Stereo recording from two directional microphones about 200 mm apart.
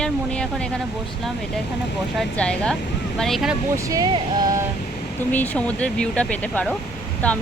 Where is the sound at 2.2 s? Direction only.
5° left (ahead or behind).